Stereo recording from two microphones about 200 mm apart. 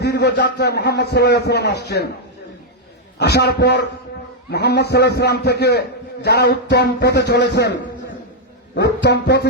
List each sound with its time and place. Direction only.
0.0 s a man's voice: 55° left (ahead or behind)
3.2 s a man's voice: 55° left (ahead or behind)
8.7 s a man's voice: 55° left (ahead or behind)